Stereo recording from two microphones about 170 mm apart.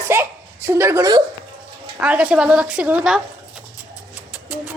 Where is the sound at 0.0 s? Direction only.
15° right (ahead or behind).